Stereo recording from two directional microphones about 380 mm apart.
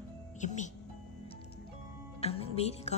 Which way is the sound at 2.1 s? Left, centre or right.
Centre.